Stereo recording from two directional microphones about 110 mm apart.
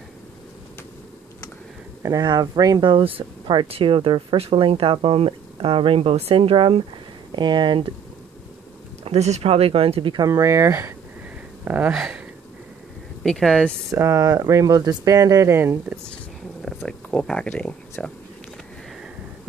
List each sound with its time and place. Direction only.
2.0 s speech: 35° right (ahead or behind)
9.0 s speech: 75° right (ahead or behind)
10.1 s speech: 30° right (ahead or behind)
11.6 s speech: 15° right (ahead or behind)
11.9 s speech: 5° right (ahead or behind)
13.2 s speech: 5° left (ahead or behind)
13.8 s speech: 25° right (ahead or behind)
16.6 s speech: 5° left (ahead or behind)